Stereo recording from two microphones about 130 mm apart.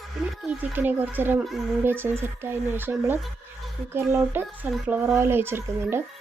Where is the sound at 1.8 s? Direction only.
15° right (ahead or behind).